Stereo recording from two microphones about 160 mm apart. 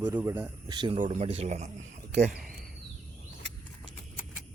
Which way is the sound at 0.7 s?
30° right (ahead or behind).